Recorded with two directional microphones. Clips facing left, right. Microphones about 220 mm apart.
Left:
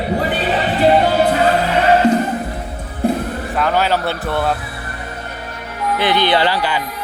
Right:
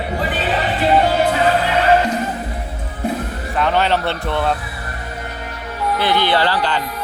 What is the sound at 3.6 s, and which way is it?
Speech, 5° left (ahead or behind).